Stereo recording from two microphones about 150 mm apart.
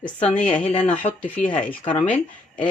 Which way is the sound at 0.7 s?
50° left (ahead or behind).